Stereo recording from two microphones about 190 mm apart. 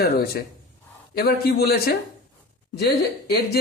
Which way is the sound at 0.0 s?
55° left (ahead or behind).